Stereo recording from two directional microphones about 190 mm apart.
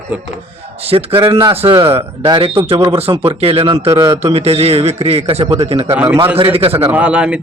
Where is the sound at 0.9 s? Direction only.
30° right (ahead or behind).